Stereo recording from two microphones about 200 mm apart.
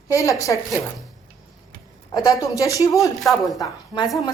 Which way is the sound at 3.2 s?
Centre (ahead or behind).